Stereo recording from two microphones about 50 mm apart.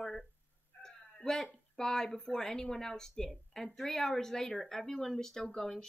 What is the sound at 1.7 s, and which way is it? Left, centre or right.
Speech, centre.